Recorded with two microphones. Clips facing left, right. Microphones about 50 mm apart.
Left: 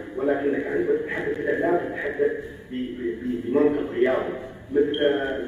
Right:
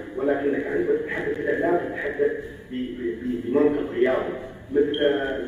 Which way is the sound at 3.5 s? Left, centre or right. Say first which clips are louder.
Even; centre.